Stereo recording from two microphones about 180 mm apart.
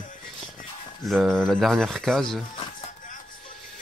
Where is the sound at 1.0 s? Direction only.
Centre (ahead or behind).